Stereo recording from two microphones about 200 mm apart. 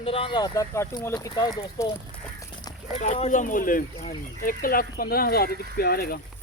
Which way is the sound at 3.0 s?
35° left (ahead or behind).